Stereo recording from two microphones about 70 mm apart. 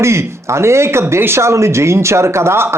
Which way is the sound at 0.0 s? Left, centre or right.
Right.